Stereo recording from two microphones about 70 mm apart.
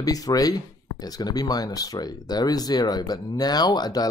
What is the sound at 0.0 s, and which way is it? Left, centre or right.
Speech, left.